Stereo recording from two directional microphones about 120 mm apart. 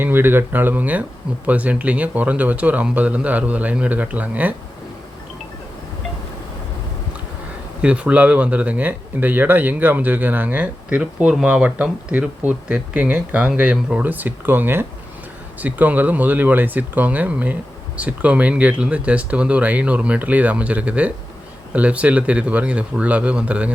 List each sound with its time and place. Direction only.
0.0 s speech: 20° right (ahead or behind)
7.8 s speech: 10° right (ahead or behind)